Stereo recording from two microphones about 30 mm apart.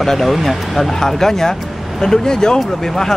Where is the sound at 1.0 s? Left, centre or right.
Centre.